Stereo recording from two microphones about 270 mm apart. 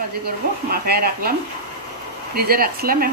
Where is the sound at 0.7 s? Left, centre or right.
Right.